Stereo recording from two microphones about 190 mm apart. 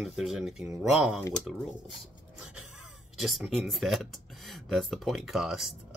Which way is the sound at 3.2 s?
Centre (ahead or behind).